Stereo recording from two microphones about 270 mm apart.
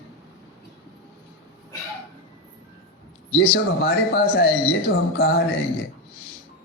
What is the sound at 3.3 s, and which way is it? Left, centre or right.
Speech, left.